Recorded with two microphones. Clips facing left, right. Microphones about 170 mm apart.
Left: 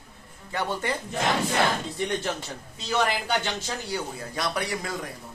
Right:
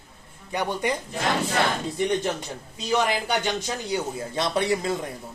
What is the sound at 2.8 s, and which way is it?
Speech, 15° right (ahead or behind).